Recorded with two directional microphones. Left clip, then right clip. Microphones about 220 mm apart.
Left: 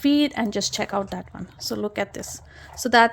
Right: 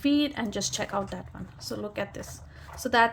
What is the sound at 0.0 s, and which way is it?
Speech, 30° left (ahead or behind).